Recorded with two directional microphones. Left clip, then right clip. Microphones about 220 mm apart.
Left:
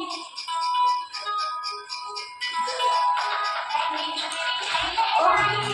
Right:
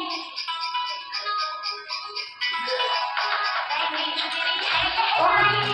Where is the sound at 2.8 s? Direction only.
55° left (ahead or behind).